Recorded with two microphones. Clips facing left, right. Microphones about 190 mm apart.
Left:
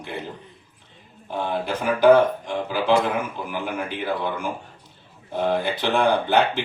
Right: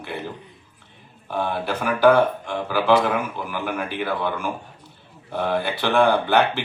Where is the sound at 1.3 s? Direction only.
20° left (ahead or behind).